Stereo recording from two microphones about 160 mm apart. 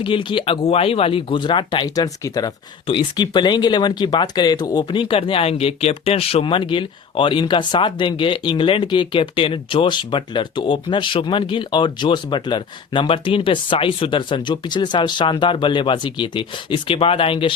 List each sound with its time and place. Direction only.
0.0 s speech: 30° left (ahead or behind)